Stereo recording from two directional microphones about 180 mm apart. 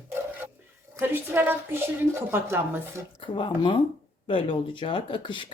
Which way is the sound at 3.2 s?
30° left (ahead or behind).